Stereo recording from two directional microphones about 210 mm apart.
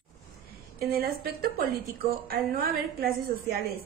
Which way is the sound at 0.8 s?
45° right (ahead or behind).